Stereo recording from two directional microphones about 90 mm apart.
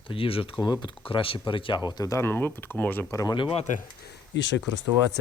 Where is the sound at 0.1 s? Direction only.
90° left.